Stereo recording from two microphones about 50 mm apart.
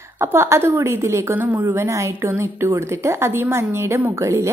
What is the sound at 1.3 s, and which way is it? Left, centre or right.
Speech, right.